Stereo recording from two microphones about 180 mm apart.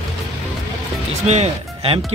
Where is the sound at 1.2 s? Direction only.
35° right (ahead or behind).